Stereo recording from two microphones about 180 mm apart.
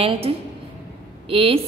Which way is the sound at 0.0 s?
30° right (ahead or behind).